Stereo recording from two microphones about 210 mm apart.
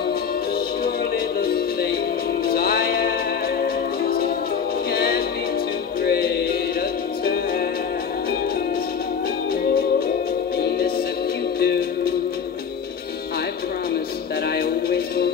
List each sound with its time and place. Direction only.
0.8 s music: 45° left (ahead or behind)
11.6 s music: 50° left (ahead or behind)
14.5 s music: 45° left (ahead or behind)